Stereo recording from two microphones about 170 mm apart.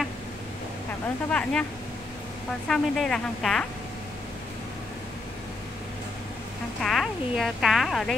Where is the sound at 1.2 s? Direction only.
5° left (ahead or behind).